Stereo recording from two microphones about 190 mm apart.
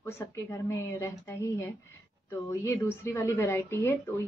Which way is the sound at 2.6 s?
15° left (ahead or behind).